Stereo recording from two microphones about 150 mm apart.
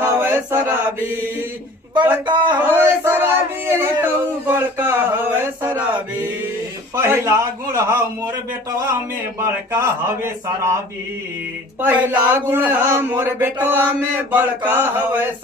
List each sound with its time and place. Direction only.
0.0 s chant: 15° right (ahead or behind)
2.2 s speech: 30° right (ahead or behind)
2.7 s a man's voice: 15° right (ahead or behind)
7.0 s a man's voice: 15° right (ahead or behind)
9.4 s a man's voice: 20° right (ahead or behind)
11.8 s a man's voice: 10° right (ahead or behind)